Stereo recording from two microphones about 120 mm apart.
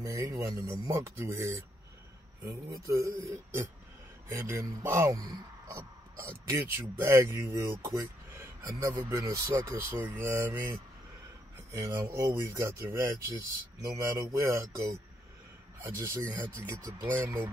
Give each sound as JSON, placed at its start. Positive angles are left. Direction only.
{"t": 0.0, "sound": "speech", "side_deg": -25}